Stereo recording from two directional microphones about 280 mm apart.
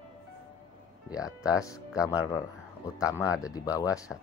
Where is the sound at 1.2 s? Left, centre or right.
Centre.